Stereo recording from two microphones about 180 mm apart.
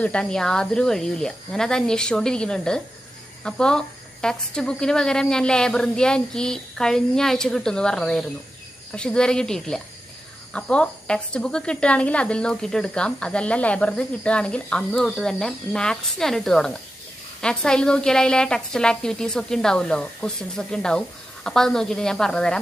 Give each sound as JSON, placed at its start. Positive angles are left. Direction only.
{"t": 0.0, "sound": "a woman's voice", "side_deg": 5}